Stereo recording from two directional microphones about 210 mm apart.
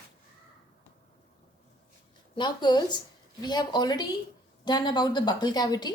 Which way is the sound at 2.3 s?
20° left (ahead or behind).